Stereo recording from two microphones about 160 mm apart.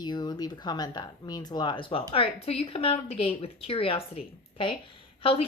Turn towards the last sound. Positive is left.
turn(degrees=35)  # may be behind; listen again after turning